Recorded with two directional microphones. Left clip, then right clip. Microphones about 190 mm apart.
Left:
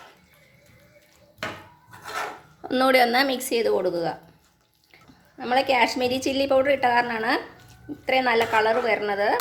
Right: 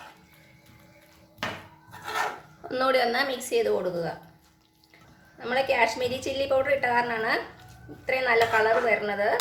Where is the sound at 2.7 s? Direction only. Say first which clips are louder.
Left 5 dB; 50° left (ahead or behind).